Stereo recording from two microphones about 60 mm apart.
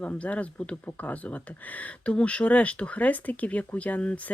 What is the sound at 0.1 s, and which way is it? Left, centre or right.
Speech, left.